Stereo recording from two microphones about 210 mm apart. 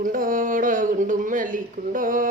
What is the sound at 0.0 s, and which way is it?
A woman's voice, 40° right (ahead or behind).